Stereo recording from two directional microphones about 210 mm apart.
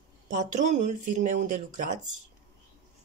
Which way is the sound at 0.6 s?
35° right (ahead or behind).